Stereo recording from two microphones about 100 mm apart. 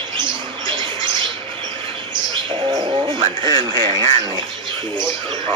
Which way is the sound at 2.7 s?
45° right (ahead or behind).